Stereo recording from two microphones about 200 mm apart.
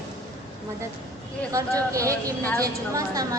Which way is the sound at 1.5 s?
15° right (ahead or behind).